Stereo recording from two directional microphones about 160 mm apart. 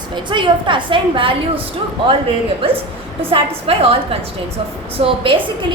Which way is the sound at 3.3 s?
35° right (ahead or behind).